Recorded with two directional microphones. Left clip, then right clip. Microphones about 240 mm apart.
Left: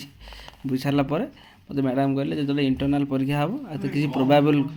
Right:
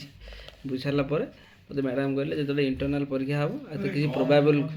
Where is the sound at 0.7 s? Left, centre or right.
Left.